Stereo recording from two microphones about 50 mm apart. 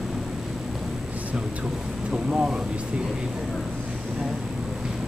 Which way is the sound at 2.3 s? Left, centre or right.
Centre.